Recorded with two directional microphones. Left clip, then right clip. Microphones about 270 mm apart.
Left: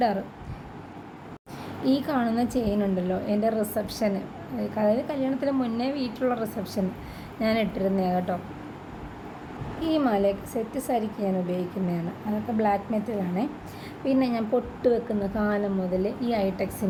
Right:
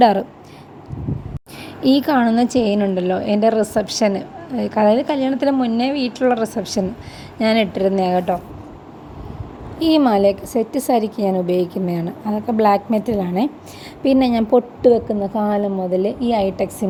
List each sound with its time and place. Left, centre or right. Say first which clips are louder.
1.8 s a woman's voice: right 10 dB; right
9.8 s a woman's voice: right 10 dB; right